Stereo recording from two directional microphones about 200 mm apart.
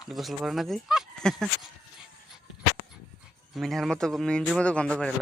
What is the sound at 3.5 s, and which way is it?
A man's voice, centre (ahead or behind).